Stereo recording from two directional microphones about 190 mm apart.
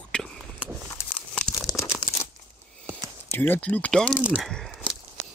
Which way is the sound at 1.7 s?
20° left (ahead or behind).